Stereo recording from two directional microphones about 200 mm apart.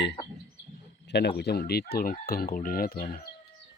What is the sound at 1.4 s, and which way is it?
Chicken, 55° left (ahead or behind).